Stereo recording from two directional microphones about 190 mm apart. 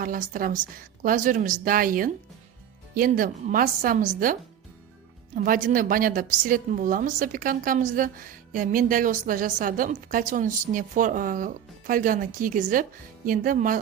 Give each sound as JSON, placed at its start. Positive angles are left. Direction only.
{"t": 0.0, "sound": "a woman's voice", "side_deg": -45}
{"t": 5.3, "sound": "a woman's voice", "side_deg": -45}